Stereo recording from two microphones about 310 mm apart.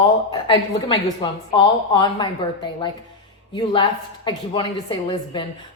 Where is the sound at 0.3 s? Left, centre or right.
Centre.